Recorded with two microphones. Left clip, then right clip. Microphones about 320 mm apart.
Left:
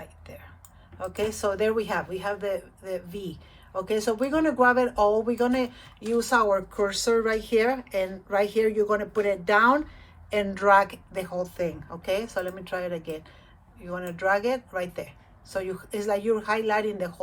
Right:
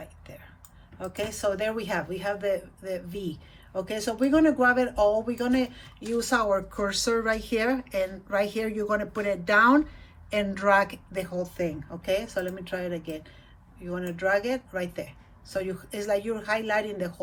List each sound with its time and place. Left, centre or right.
0.0 s whispering: centre
0.9 s speech: centre